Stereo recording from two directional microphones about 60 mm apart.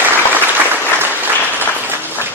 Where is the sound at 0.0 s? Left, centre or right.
Right.